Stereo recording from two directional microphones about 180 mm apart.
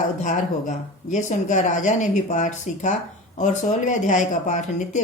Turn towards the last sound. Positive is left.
turn(degrees=40)  # may be behind; listen again after turning